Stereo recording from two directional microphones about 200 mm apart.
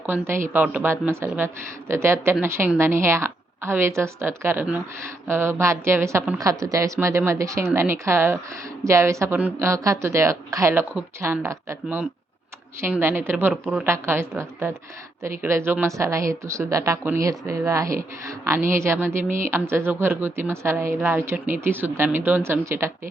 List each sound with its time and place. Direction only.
0.0 s a woman's voice: 10° right (ahead or behind)